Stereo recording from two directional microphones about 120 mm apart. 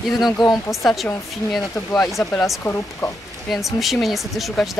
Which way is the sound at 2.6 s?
20° left (ahead or behind).